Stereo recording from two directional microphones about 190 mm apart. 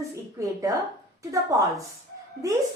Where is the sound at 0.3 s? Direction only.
15° right (ahead or behind).